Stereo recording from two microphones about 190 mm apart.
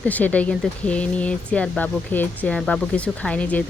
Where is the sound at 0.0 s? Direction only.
10° left (ahead or behind).